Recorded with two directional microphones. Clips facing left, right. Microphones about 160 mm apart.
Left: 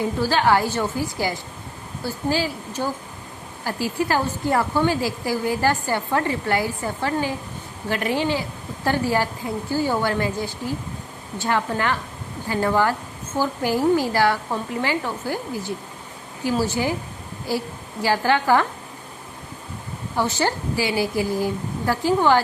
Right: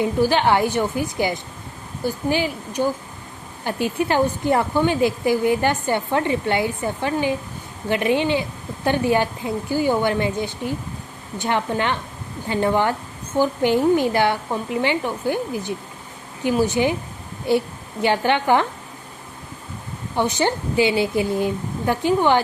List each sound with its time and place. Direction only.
0.0 s speech: 20° right (ahead or behind)
20.1 s speech: 20° right (ahead or behind)